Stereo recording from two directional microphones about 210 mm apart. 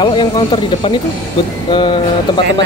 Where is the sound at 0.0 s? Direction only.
20° left (ahead or behind).